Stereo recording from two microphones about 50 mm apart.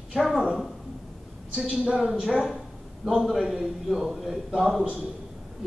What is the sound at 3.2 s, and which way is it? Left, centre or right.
A man's voice, centre.